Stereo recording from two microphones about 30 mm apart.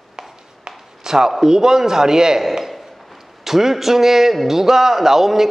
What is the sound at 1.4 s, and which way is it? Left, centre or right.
A man's voice, centre.